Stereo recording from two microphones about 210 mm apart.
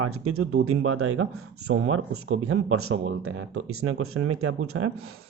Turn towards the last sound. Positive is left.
turn(degrees=-90)